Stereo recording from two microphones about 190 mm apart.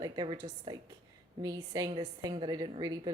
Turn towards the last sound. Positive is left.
turn(degrees=-20)  # may be behind; listen again after turning